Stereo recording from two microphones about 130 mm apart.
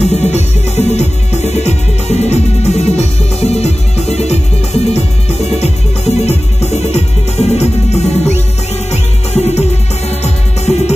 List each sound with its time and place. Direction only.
0.0 s music: 55° left (ahead or behind)
5.6 s music: 55° left (ahead or behind)